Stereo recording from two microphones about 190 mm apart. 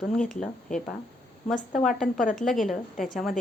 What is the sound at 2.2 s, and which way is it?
Speech, 45° left (ahead or behind).